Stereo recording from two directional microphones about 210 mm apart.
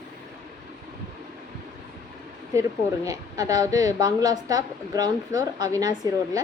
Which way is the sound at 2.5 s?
15° right (ahead or behind).